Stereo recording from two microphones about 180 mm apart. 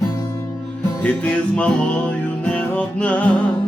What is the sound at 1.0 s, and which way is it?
Music, 5° left (ahead or behind).